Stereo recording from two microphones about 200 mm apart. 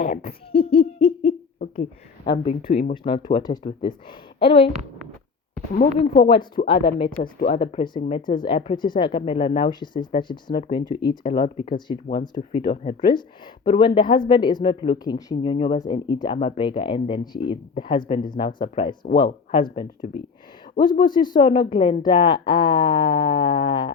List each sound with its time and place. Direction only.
0.7 s hoot: 30° left (ahead or behind)
1.3 s a sound: 40° left (ahead or behind)
1.7 s a sound: 25° left (ahead or behind)
2.4 s speech: 30° left (ahead or behind)
6.0 s speech: 25° left (ahead or behind)
7.2 s speech: 45° left (ahead or behind)
7.6 s speech: 30° left (ahead or behind)
21.0 s speech: 20° left (ahead or behind)